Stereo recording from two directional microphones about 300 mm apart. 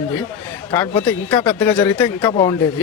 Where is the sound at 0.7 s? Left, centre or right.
Centre.